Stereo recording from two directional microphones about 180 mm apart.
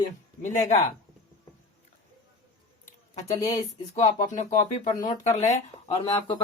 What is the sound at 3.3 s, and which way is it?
Speech, 20° left (ahead or behind).